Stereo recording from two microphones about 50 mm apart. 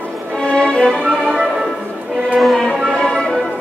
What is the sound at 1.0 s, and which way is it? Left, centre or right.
Music, centre.